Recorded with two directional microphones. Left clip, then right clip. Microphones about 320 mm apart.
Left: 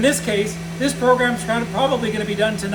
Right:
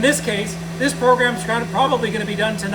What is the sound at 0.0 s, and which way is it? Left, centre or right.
Speech, centre.